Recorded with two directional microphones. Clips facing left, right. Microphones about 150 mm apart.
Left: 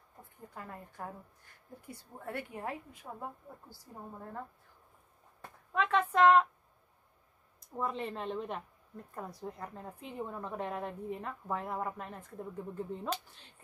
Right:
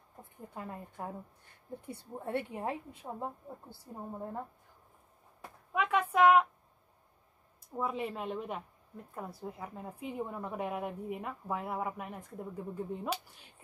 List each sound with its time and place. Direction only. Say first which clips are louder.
0.2 s a woman's voice: right 4 dB; 20° right (ahead or behind)
2.1 s a woman's voice: right 5 dB; 25° right (ahead or behind)
5.7 s a sound: even; 10° right (ahead or behind)
7.6 s a woman's voice: right 1 dB; 5° right (ahead or behind)